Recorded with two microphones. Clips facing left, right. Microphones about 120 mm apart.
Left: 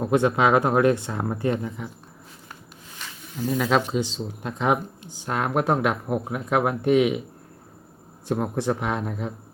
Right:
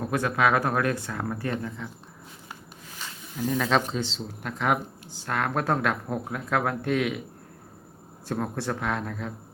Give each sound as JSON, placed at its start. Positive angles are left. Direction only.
{"t": 0.0, "sound": "speech", "side_deg": 20}
{"t": 3.3, "sound": "speech", "side_deg": 10}
{"t": 8.3, "sound": "speech", "side_deg": 15}